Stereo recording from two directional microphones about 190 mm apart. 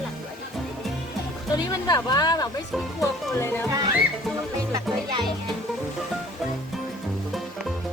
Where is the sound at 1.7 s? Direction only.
20° left (ahead or behind).